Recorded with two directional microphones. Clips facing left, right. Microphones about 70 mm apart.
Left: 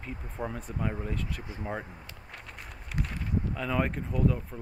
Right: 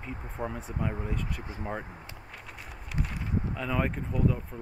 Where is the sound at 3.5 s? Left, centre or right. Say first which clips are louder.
Left 1 dB; centre.